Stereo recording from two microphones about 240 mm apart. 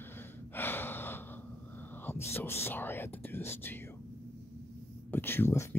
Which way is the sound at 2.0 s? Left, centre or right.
Centre.